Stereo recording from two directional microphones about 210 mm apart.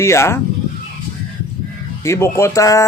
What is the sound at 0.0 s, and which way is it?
Speech, 15° left (ahead or behind).